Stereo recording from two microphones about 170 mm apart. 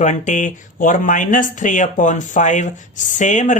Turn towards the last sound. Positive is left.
turn(degrees=45)  # may be behind; listen again after turning